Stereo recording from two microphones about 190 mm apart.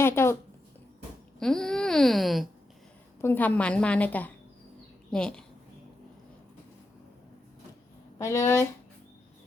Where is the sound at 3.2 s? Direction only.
10° left (ahead or behind).